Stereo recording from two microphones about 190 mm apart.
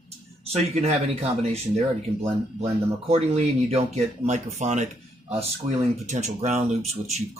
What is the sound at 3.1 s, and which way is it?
Speech, 35° right (ahead or behind).